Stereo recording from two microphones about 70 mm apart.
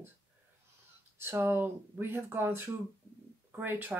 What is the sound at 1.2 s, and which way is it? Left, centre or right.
Speech, right.